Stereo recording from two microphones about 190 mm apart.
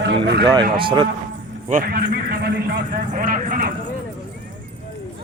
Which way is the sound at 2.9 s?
45° right (ahead or behind).